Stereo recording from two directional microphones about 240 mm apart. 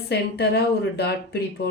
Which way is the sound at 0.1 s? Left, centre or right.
Left.